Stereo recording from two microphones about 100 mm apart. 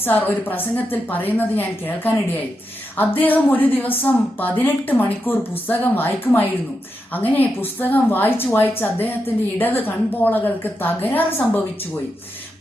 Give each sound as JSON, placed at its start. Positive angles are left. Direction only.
{"t": 0.0, "sound": "a woman's voice", "side_deg": 20}